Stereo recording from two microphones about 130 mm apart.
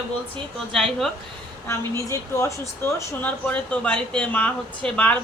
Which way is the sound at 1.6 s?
20° left (ahead or behind).